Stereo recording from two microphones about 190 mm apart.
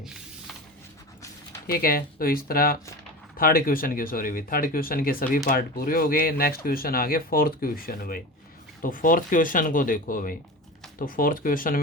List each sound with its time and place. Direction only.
1.6 s speech: 50° left (ahead or behind)